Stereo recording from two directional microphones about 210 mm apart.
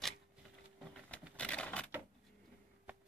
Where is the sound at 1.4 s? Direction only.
5° left (ahead or behind).